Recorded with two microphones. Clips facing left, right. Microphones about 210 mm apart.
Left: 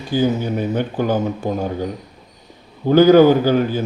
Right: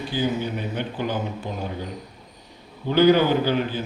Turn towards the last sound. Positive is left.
turn(degrees=45)  # may be behind; listen again after turning